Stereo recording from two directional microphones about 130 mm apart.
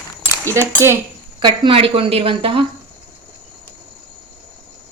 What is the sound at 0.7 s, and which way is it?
Speech, 20° right (ahead or behind).